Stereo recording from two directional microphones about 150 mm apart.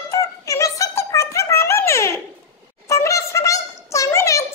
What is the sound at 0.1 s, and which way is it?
Music, 20° left (ahead or behind).